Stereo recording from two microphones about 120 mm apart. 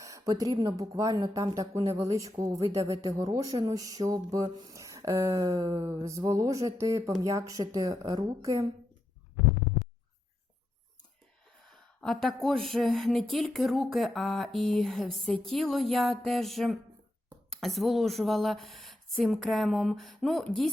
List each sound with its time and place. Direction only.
0.0 s a sound: 30° right (ahead or behind)
0.5 s speech: 30° right (ahead or behind)
11.7 s a woman's voice: 5° left (ahead or behind)